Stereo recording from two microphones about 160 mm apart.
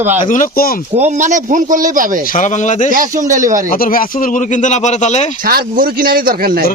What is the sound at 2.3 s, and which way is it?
Speech, 50° left (ahead or behind).